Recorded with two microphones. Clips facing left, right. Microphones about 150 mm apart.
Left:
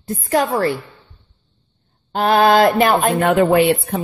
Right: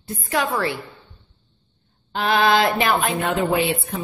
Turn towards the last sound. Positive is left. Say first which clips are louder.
# left 7 dB
turn(degrees=60)  # may be behind; listen again after turning